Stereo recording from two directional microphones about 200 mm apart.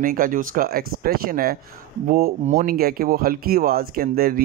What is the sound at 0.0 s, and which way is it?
Speech, 45° right (ahead or behind).